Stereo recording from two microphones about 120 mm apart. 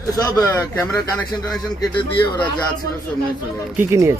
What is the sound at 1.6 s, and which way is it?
Speech, 30° left (ahead or behind).